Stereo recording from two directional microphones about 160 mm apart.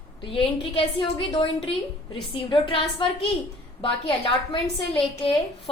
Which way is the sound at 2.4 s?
30° left (ahead or behind).